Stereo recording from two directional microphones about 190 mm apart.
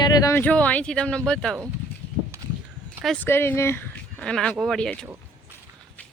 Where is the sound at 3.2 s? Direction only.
10° left (ahead or behind).